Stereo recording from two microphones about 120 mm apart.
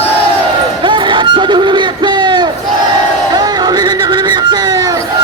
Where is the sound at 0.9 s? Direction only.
40° right (ahead or behind).